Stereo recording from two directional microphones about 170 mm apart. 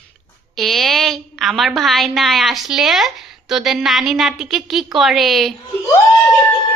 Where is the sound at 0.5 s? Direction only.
Centre (ahead or behind).